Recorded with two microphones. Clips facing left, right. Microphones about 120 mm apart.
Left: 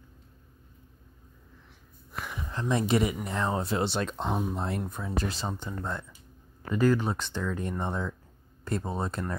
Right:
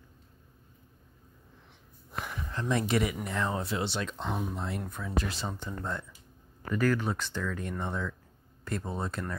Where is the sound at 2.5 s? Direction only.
25° left (ahead or behind); by 4.2 s 45° left (ahead or behind).